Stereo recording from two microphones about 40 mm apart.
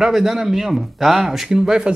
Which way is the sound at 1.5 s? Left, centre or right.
Centre.